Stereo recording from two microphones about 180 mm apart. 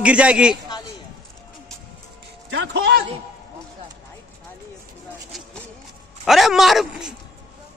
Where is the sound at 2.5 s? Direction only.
85° right.